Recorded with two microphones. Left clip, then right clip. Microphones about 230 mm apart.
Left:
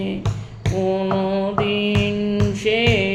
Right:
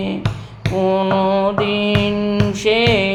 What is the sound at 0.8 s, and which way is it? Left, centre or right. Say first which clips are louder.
Music: right 6 dB; centre.